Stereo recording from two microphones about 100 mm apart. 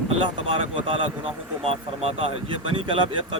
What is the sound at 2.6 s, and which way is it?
Speech, 60° right (ahead or behind).